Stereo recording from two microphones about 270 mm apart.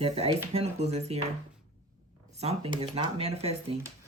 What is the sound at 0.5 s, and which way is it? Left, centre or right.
Speech, right.